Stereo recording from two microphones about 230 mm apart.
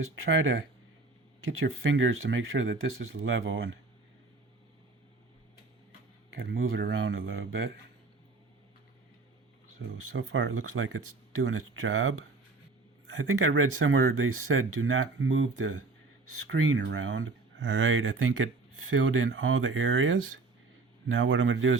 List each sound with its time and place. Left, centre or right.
1.5 s speech: right
6.3 s speech: right
9.8 s speech: right
13.2 s speech: right